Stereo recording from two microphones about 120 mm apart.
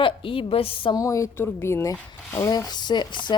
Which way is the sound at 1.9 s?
20° left (ahead or behind).